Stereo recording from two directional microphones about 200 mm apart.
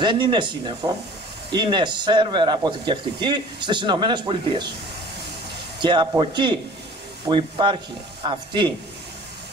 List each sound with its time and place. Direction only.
0.0 s speech: 25° right (ahead or behind)
5.8 s speech: 25° right (ahead or behind)